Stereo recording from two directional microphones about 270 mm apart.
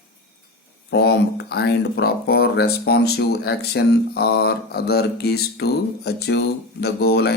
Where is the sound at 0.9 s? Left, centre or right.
Left.